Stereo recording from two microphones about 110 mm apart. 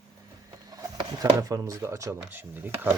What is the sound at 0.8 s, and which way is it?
Speech, 35° right (ahead or behind).